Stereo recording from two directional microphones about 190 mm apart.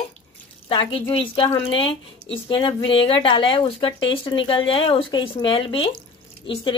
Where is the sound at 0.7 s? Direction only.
25° left (ahead or behind).